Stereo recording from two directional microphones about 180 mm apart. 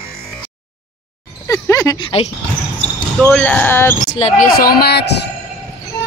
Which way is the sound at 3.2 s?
10° left (ahead or behind).